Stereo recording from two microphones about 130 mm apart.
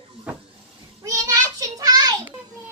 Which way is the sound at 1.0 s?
25° right (ahead or behind).